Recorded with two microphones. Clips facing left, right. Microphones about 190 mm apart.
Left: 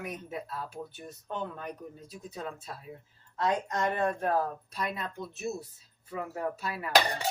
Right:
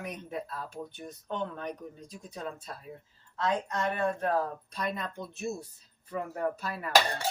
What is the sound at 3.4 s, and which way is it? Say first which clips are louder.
Speech: left 1 dB; 15° left (ahead or behind).